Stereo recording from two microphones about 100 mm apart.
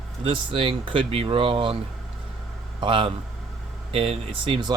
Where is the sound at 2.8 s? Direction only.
60° right (ahead or behind).